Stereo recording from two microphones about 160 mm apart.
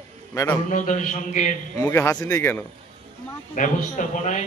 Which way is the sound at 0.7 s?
50° left (ahead or behind).